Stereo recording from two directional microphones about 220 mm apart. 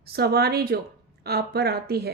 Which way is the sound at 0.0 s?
45° right (ahead or behind).